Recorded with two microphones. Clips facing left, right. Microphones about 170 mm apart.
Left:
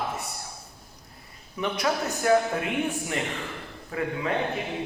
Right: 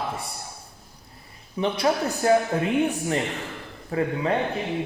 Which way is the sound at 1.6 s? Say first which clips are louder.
Right 4 dB; 30° right (ahead or behind).